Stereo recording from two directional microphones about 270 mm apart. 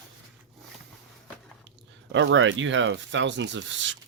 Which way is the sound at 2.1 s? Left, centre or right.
Right.